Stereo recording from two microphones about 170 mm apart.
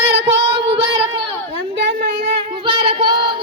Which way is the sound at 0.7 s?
30° right (ahead or behind).